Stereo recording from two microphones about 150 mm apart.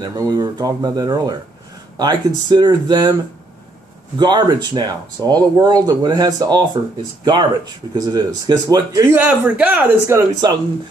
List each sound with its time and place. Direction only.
0.0 s speech: 25° right (ahead or behind)
4.2 s speech: 30° right (ahead or behind)
9.1 s speech: 10° right (ahead or behind)